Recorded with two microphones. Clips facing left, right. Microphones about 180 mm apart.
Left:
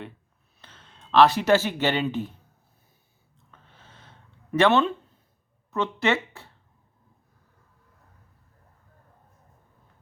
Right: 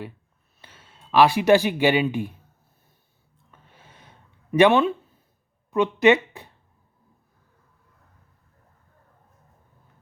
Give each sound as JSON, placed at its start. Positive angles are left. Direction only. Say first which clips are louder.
{"t": 0.6, "sound": "speech", "louder": "right 1 dB", "side_deg": -10}
{"t": 3.5, "sound": "a sound", "louder": "right 1 dB", "side_deg": -10}
{"t": 5.7, "sound": "speech", "louder": "right 7 dB", "side_deg": -15}